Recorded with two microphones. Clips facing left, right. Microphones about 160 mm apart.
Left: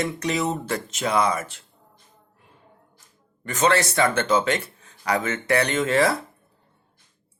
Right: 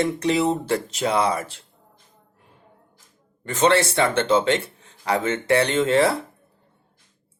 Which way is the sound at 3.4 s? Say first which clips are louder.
Right 2 dB; 30° right (ahead or behind).